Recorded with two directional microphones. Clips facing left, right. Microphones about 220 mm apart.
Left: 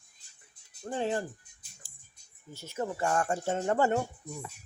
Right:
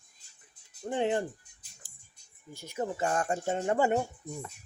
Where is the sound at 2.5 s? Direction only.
15° right (ahead or behind).